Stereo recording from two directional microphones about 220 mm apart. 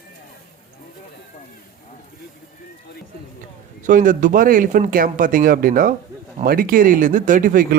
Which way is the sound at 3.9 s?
35° right (ahead or behind).